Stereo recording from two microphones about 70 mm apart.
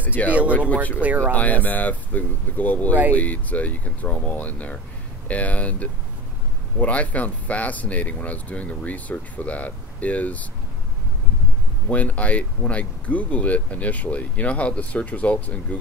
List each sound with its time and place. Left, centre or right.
0.0 s speech: left
11.9 s speech: left